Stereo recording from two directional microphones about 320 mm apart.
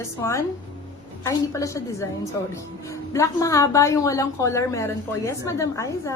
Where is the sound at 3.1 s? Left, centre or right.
Centre.